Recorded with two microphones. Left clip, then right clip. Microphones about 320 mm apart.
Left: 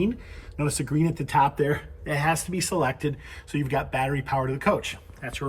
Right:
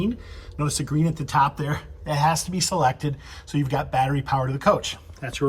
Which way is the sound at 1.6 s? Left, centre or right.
Centre.